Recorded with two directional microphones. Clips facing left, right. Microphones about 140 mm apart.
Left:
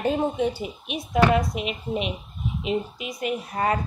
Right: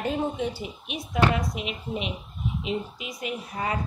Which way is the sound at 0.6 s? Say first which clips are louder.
Left 3 dB; 60° left (ahead or behind).